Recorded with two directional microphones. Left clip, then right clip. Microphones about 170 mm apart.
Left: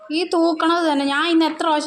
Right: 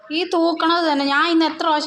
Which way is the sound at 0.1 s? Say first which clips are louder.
Even; 20° left (ahead or behind).